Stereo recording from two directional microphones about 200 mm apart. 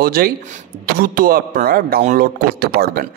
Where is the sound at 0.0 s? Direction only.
50° right (ahead or behind).